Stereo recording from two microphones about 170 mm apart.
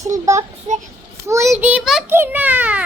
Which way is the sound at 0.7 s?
40° right (ahead or behind).